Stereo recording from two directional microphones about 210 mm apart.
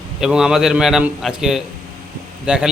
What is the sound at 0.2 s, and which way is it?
A man's voice, 5° right (ahead or behind).